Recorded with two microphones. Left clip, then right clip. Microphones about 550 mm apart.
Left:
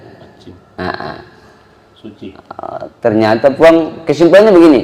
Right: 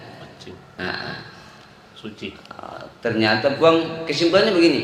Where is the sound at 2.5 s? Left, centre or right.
Left.